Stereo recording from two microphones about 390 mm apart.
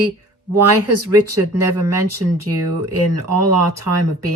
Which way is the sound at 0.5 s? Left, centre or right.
Right.